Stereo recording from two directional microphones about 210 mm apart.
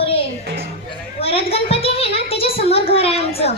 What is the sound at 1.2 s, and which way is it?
A child's voice, 25° left (ahead or behind).